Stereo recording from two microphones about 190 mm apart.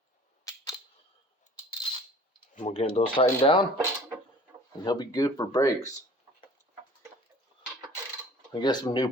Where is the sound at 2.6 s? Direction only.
30° left (ahead or behind).